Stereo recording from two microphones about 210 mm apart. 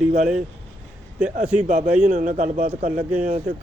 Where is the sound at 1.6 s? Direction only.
35° right (ahead or behind).